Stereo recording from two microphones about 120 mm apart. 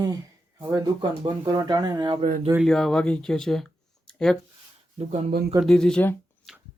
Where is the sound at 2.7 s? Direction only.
5° left (ahead or behind).